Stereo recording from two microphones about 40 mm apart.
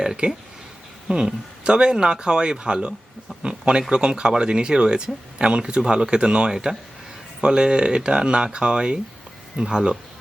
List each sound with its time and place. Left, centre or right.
0.0 s speech: centre